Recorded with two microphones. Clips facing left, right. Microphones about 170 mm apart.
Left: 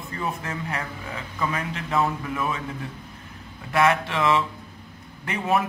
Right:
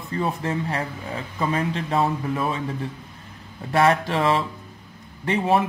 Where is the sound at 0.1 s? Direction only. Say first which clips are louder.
Right 6 dB; 30° right (ahead or behind).